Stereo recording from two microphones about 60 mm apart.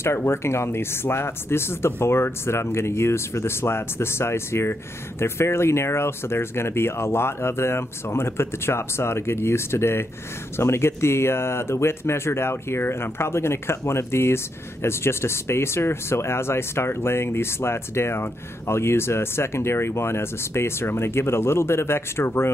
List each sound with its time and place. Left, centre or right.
0.0 s speech: left